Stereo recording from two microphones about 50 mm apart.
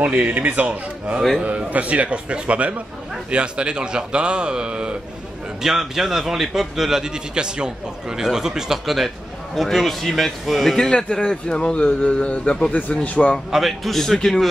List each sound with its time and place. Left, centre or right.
0.0 s a man's voice: right
5.6 s a man's voice: centre; by 13.4 s left
13.5 s a man's voice: centre